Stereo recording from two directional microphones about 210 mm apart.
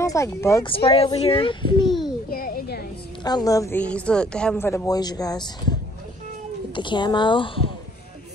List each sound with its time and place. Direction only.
0.0 s a woman's voice: 15° left (ahead or behind)
0.7 s speech: 25° left (ahead or behind)
1.9 s a sound: centre (ahead or behind)
2.3 s a sound: 45° left (ahead or behind)
3.3 s a woman's voice: 20° left (ahead or behind)
6.7 s speech: 20° left (ahead or behind)